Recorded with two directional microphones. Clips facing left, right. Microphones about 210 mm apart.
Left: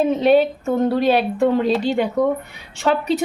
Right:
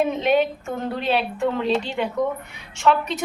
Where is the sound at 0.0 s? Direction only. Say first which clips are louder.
Left 5 dB; 35° left (ahead or behind).